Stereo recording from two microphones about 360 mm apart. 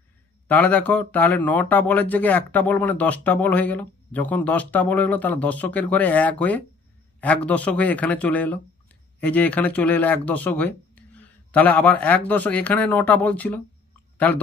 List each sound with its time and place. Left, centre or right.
0.5 s speech: centre